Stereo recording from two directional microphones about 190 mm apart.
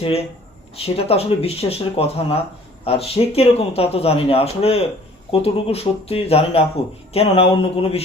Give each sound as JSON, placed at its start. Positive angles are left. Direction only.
{"t": 0.0, "sound": "speech", "side_deg": 30}